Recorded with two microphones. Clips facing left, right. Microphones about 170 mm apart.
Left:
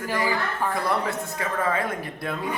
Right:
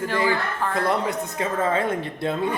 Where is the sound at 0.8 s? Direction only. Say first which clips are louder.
Right 2 dB; 20° right (ahead or behind).